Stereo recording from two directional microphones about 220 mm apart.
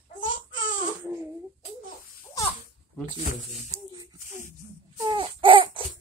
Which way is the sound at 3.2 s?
35° left (ahead or behind).